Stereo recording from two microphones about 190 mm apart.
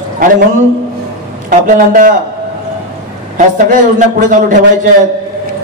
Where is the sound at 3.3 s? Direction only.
45° right (ahead or behind).